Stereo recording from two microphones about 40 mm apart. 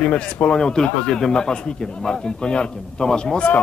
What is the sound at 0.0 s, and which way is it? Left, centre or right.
Speech, left.